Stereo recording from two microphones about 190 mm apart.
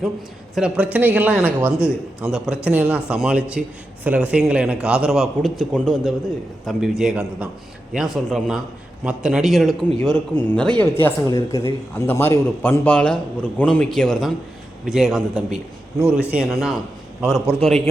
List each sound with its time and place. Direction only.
0.5 s a man's voice: 5° right (ahead or behind)